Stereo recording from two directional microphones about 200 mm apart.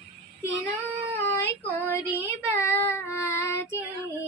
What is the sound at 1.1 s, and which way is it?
Child singing, 10° left (ahead or behind).